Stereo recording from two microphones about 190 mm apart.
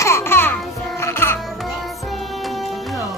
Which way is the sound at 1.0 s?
15° left (ahead or behind).